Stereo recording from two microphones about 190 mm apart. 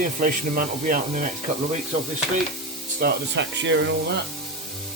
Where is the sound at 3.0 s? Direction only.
65° right (ahead or behind).